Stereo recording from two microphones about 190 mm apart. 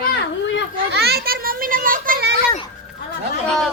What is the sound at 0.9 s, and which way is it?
Children playing, 60° right (ahead or behind).